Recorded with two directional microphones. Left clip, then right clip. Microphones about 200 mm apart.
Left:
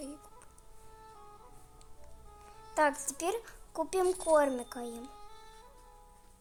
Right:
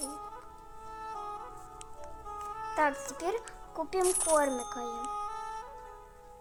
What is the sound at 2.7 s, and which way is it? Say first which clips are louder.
Speech: left 1 dB; 5° left (ahead or behind).